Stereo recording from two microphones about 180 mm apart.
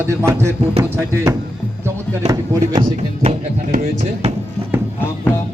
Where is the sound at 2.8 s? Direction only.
35° right (ahead or behind).